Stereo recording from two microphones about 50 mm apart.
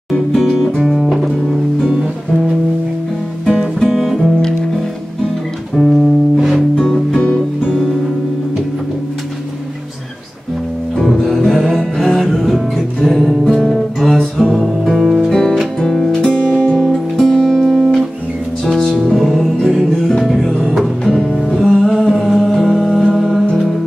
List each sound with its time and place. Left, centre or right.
0.4 s music: centre
3.8 s music: centre
5.8 s music: centre
6.9 s music: centre
11.0 s music: centre
15.3 s music: centre
16.1 s music: centre
16.7 s music: centre
19.1 s music: centre
21.5 s humming: centre